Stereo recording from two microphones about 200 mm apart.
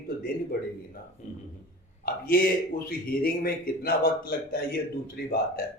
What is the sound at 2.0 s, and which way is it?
A man's voice, 50° left (ahead or behind).